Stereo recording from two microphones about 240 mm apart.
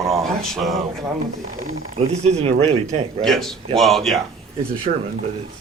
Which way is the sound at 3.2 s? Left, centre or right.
Centre.